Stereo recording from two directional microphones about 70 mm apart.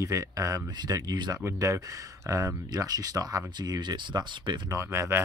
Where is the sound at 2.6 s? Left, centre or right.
Right.